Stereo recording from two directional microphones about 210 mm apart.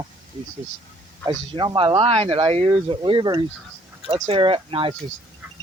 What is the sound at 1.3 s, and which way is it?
Speech, 25° right (ahead or behind).